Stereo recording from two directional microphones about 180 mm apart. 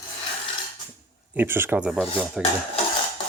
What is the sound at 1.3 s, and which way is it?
Speech, 10° right (ahead or behind).